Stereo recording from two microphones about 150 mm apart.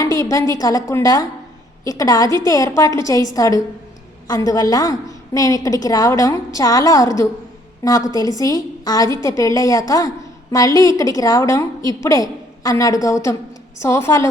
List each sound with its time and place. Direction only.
0.0 s a woman's voice: 20° left (ahead or behind)